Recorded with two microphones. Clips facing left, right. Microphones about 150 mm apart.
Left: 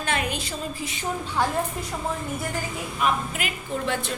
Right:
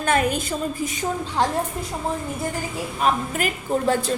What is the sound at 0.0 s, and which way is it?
Speech, 45° right (ahead or behind).